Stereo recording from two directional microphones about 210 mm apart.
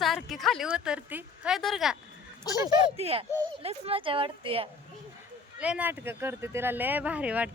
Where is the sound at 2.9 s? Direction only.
30° right (ahead or behind).